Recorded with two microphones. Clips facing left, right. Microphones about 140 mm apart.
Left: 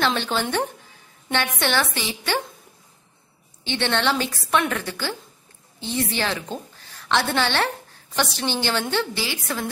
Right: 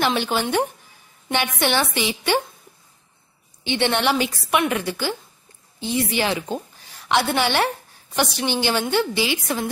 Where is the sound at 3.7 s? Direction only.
15° right (ahead or behind).